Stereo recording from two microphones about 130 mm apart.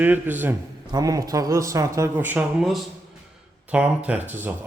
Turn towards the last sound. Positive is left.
turn(degrees=-15)  # may be behind; listen again after turning